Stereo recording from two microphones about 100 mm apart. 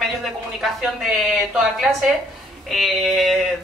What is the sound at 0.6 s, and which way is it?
A woman's voice, 5° right (ahead or behind).